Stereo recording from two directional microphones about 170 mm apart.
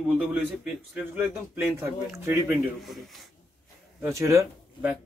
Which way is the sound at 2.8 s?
Centre (ahead or behind).